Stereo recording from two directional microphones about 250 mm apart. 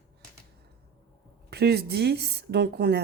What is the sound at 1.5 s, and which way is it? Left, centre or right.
A woman's voice, right.